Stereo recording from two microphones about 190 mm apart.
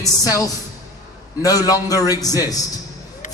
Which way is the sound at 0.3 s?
20° left (ahead or behind).